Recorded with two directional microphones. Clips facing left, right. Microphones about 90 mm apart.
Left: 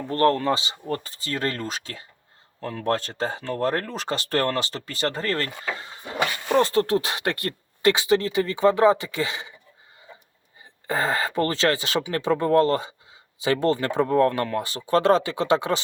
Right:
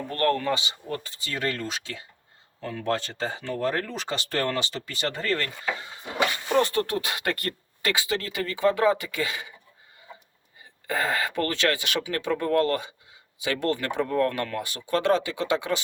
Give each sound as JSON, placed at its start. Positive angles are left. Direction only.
{"t": 0.1, "sound": "speech", "side_deg": 30}
{"t": 10.8, "sound": "speech", "side_deg": 30}